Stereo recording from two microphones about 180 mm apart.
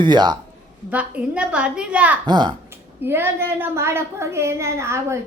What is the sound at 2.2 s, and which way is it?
Speech, 25° right (ahead or behind).